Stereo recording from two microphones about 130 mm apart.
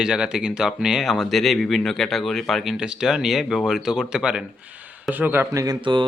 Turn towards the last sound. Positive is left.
turn(degrees=-35)  # may be behind; listen again after turning